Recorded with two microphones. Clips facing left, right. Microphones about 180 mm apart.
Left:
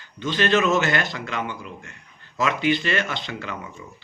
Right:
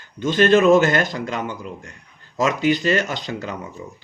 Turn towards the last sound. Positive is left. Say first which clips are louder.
# right 4 dB
turn(degrees=-40)  # may be behind; listen again after turning